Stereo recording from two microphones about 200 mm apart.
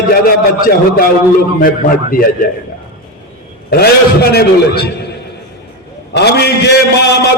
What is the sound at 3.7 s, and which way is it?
A man's voice, 50° left (ahead or behind).